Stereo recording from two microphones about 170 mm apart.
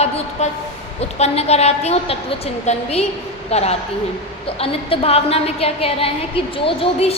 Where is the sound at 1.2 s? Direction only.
40° left (ahead or behind).